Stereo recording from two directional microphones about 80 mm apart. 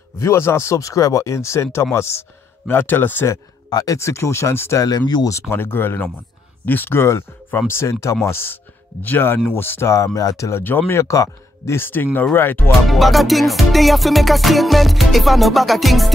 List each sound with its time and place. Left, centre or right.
0.2 s speech: left
3.7 s speech: left
4.8 s speech: left
5.5 s speech: left
12.8 s music: centre